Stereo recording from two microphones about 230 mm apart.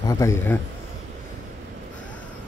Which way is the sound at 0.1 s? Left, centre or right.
Centre.